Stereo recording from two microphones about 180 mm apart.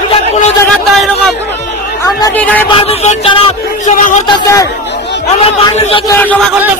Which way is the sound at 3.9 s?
45° left (ahead or behind).